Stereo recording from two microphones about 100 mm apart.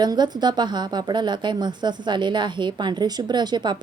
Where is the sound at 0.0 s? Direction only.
45° right (ahead or behind).